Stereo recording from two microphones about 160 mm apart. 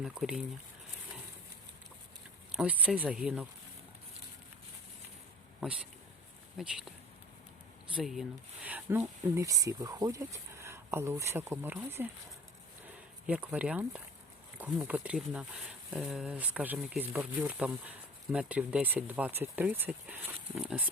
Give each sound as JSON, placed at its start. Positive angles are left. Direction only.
{"t": 0.0, "sound": "speech", "side_deg": -5}
{"t": 2.5, "sound": "speech", "side_deg": -5}
{"t": 5.6, "sound": "speech", "side_deg": -5}
{"t": 7.9, "sound": "speech", "side_deg": 0}
{"t": 9.0, "sound": "speech", "side_deg": -20}
{"t": 13.2, "sound": "speech", "side_deg": -10}